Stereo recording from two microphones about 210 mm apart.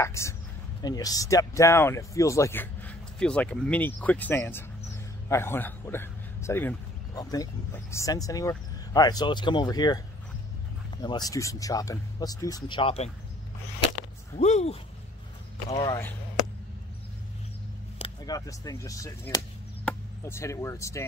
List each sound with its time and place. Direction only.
0.0 s a man's voice: 15° left (ahead or behind)
11.0 s speech: 20° left (ahead or behind)
14.3 s speech: 30° left (ahead or behind)
15.7 s speech: 20° left (ahead or behind)
17.9 s speech: 20° left (ahead or behind)